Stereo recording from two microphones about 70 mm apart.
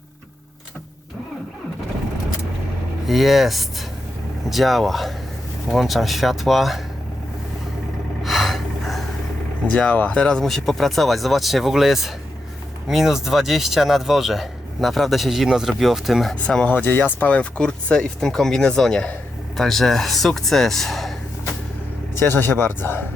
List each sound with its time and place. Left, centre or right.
3.1 s speech: centre
8.2 s gasp: centre
9.6 s speech: centre
16.3 s speech: centre
16.8 s speech: left; by 21.2 s centre
22.3 s speech: left